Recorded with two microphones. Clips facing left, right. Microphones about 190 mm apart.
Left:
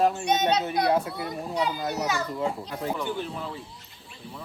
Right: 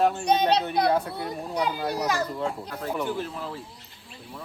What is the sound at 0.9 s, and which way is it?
A child's voice, centre (ahead or behind).